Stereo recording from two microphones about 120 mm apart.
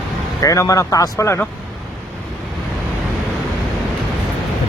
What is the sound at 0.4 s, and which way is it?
Speech, 25° left (ahead or behind).